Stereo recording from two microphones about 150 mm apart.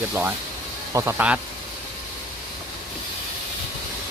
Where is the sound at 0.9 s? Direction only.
20° right (ahead or behind).